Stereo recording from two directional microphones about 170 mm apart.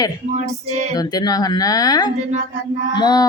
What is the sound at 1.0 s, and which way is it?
Speech, 25° left (ahead or behind).